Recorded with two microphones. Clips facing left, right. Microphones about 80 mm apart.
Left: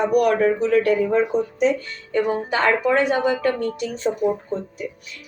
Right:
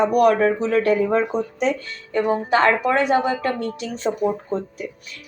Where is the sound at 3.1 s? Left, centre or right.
Centre.